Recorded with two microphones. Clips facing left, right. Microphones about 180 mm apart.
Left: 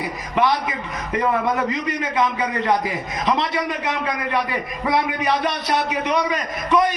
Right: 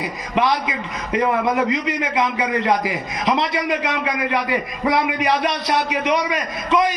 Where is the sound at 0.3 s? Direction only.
20° right (ahead or behind).